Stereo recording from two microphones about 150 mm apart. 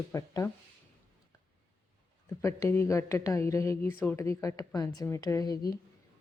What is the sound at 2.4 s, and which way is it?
Speech, 15° left (ahead or behind).